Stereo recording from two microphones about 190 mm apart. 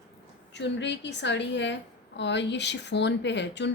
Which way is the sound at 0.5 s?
65° left (ahead or behind).